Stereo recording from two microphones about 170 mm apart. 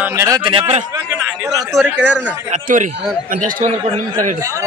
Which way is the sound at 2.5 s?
50° right (ahead or behind).